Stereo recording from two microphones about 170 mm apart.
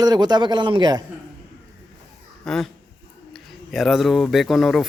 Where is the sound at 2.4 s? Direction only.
5° left (ahead or behind).